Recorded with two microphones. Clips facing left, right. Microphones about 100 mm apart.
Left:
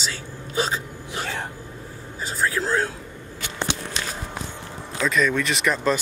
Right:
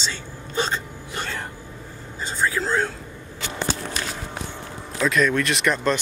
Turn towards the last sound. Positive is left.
turn(degrees=0)  # may be behind; listen again after turning